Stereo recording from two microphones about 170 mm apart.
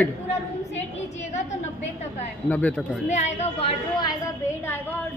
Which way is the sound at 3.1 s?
40° left (ahead or behind).